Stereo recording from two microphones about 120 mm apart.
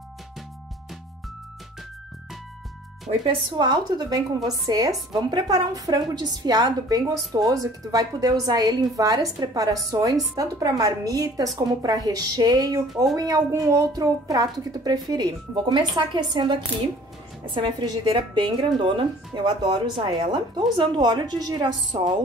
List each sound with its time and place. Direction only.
3.1 s speech: 80° right
3.5 s speech: 40° right (ahead or behind)